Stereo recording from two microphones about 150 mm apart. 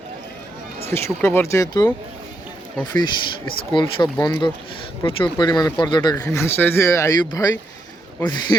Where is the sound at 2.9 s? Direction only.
30° left (ahead or behind).